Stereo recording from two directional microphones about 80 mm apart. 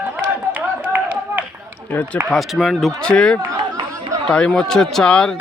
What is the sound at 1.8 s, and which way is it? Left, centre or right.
Speech, left.